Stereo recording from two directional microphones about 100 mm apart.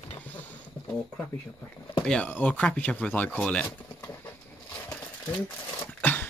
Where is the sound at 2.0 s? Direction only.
10° left (ahead or behind).